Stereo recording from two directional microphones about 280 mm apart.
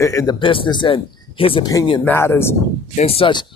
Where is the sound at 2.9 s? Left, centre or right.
Left.